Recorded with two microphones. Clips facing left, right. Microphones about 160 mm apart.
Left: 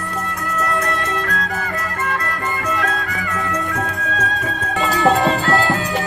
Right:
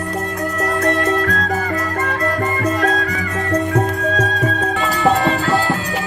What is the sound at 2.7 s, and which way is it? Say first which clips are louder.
Music: right 5 dB; 35° right (ahead or behind).